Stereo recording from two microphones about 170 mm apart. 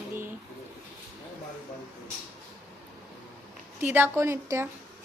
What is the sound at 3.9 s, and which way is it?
Speech, 15° right (ahead or behind).